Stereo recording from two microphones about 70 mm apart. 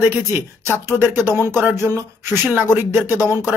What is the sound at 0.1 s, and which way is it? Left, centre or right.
Speech, right.